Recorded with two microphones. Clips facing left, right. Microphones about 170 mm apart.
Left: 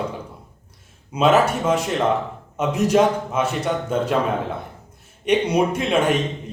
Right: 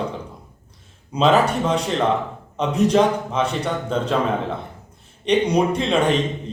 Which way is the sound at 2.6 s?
10° left (ahead or behind).